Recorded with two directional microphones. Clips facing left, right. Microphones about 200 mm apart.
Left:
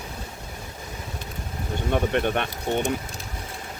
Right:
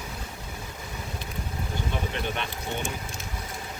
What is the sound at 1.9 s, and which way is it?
Speech, 55° left (ahead or behind).